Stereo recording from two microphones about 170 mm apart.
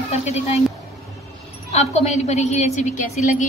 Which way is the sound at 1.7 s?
45° left (ahead or behind).